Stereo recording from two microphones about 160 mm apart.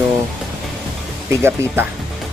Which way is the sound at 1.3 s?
15° right (ahead or behind).